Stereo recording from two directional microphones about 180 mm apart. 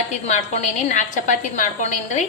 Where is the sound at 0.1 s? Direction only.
40° left (ahead or behind).